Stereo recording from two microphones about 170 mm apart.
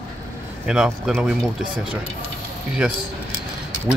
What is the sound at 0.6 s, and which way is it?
Speech, 5° right (ahead or behind).